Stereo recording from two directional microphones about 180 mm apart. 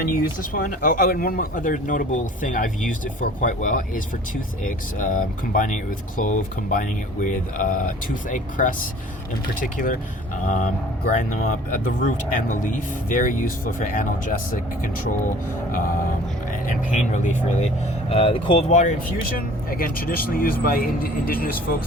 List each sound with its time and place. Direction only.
0.0 s speech: 50° left (ahead or behind)
16.5 s speech: 45° left (ahead or behind)
18.1 s speech: 30° left (ahead or behind)
18.7 s speech: 45° left (ahead or behind)